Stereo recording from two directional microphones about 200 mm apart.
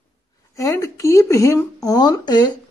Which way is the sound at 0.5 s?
15° left (ahead or behind).